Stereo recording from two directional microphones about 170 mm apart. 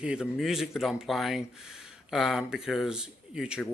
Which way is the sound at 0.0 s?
5° right (ahead or behind).